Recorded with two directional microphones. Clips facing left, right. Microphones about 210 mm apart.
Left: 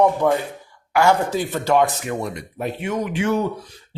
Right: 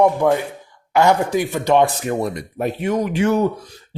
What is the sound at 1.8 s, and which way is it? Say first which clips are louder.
Speech: right 3 dB; 40° right (ahead or behind).